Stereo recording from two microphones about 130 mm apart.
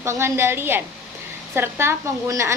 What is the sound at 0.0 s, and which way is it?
A woman's voice, 20° right (ahead or behind).